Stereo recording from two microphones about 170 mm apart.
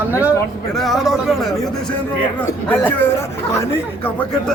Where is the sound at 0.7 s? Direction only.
Centre (ahead or behind).